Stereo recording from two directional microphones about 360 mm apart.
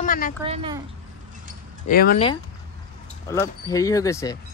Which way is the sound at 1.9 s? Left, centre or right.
Left.